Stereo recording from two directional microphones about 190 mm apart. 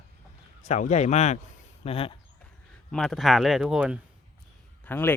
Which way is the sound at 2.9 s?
Centre (ahead or behind).